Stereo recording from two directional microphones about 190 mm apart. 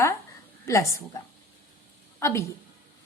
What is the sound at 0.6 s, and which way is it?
Speech, 15° left (ahead or behind).